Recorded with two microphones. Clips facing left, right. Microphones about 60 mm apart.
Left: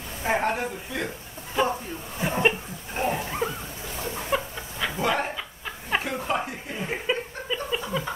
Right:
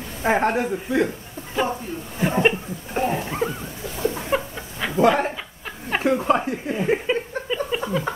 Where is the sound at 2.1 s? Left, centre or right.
Centre.